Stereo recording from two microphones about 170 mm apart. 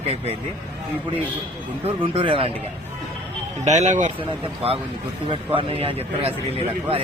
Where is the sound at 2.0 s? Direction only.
30° right (ahead or behind).